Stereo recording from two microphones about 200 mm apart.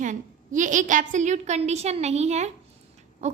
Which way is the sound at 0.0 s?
40° right (ahead or behind).